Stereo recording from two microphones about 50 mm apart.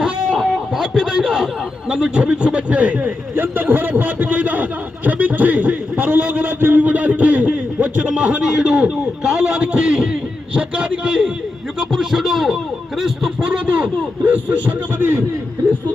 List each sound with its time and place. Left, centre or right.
0.3 s music: centre
1.1 s a sound: centre
1.9 s a man's voice: centre
3.3 s a sound: right; by 10.2 s centre
10.5 s a man's voice: right
11.8 s speech: centre
13.7 s a man's voice: right